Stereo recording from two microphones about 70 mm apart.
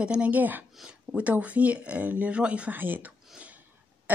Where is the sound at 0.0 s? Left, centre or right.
Centre.